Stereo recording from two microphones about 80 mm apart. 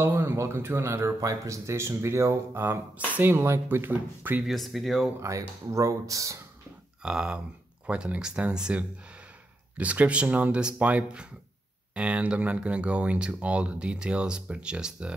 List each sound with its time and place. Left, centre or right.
0.0 s speech: right
4.5 s speech: centre
5.2 s speech: right
7.0 s speech: centre